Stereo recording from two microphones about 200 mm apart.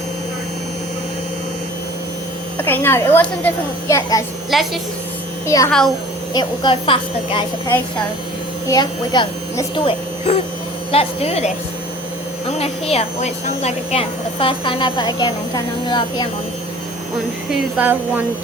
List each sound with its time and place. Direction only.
2.6 s a child's voice: 10° left (ahead or behind)
4.5 s a woman's voice: centre (ahead or behind)
5.5 s a child's voice: 15° left (ahead or behind)
8.6 s a woman's voice: 20° left (ahead or behind)
17.5 s speech: 5° right (ahead or behind)